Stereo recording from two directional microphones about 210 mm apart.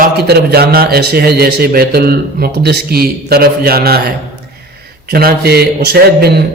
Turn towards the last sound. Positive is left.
turn(degrees=-50)  # may be behind; listen again after turning